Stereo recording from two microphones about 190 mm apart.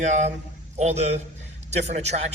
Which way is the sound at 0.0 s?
40° right (ahead or behind).